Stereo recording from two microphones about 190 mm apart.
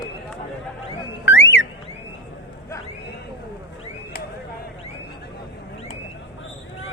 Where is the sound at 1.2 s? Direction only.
75° left (ahead or behind).